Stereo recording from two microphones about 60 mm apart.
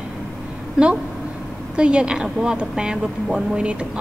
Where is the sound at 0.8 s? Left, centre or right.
Centre.